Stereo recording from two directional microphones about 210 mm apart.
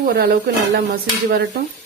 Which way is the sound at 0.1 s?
50° right (ahead or behind).